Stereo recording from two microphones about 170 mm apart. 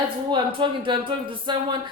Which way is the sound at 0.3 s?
30° right (ahead or behind).